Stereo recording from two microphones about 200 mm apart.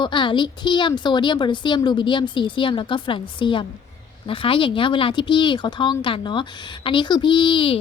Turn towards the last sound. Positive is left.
turn(degrees=25)  # may be behind; listen again after turning